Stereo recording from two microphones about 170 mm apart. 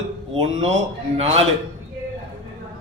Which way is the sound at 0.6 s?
40° right (ahead or behind).